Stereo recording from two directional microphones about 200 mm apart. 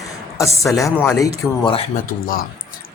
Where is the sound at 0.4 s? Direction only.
Centre (ahead or behind).